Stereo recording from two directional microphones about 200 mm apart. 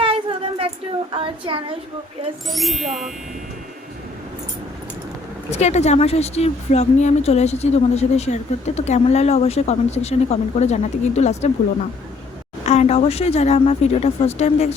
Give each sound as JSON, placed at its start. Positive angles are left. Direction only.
{"t": 0.0, "sound": "a sound", "side_deg": -30}
{"t": 1.1, "sound": "a woman's voice", "side_deg": -25}
{"t": 2.5, "sound": "speech", "side_deg": 0}
{"t": 5.5, "sound": "speech", "side_deg": 35}
{"t": 12.6, "sound": "speech", "side_deg": 35}